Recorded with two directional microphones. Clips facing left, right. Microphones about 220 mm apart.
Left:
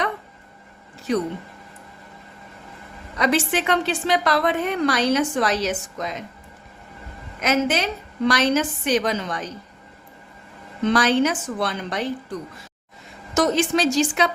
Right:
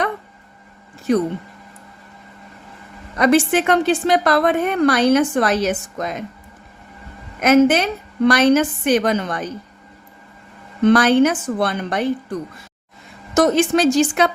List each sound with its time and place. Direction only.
1.1 s a woman's voice: 55° right (ahead or behind)
3.2 s a woman's voice: 50° right (ahead or behind)
7.4 s a woman's voice: 55° right (ahead or behind)
10.8 s a woman's voice: 55° right (ahead or behind)
13.3 s a woman's voice: 55° right (ahead or behind)